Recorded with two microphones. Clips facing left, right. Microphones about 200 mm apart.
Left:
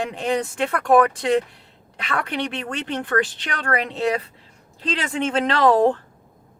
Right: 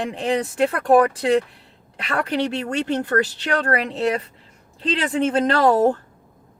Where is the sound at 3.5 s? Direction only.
35° right (ahead or behind).